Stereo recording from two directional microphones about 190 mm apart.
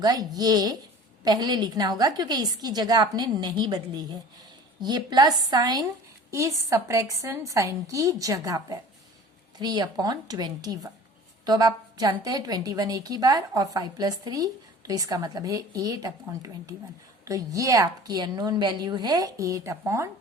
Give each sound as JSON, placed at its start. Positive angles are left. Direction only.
{"t": 0.0, "sound": "a woman's voice", "side_deg": -20}